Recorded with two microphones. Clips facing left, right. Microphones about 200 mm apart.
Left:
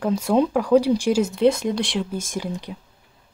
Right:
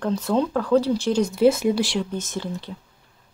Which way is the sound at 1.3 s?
5° right (ahead or behind).